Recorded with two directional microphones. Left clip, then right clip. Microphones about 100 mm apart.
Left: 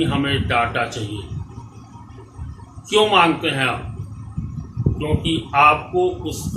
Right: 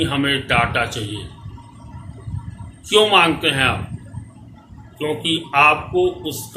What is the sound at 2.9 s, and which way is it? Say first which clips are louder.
Speech: right 1 dB; 20° right (ahead or behind).